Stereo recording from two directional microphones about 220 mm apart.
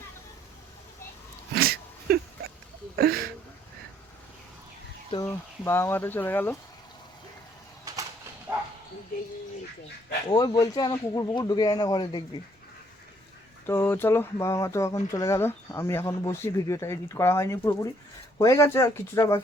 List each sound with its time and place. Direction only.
1.5 s a sound: 45° right (ahead or behind)
5.1 s speech: 10° left (ahead or behind)
10.2 s speech: 15° left (ahead or behind)
13.7 s speech: 10° left (ahead or behind)